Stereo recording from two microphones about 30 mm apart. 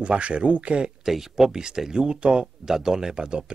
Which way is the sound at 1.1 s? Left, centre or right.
Centre.